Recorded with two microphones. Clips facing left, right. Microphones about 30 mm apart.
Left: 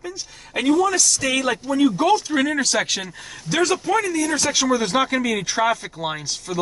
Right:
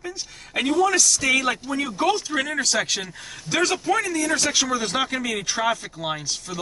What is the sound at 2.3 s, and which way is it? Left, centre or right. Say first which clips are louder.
A man's voice: left 3 dB; centre.